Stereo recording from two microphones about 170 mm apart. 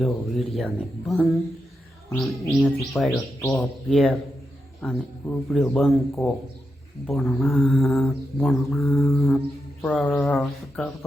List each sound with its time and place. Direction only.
0.0 s mantra: centre (ahead or behind)
3.4 s speech: 20° left (ahead or behind)
3.8 s mantra: centre (ahead or behind)